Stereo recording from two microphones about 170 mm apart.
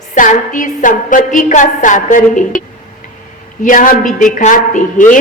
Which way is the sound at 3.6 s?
50° left (ahead or behind).